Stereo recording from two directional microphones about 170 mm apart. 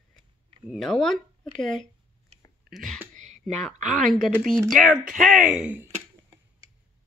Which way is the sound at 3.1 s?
45° right (ahead or behind).